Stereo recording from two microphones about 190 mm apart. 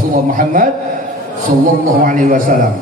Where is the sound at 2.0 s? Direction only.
45° right (ahead or behind).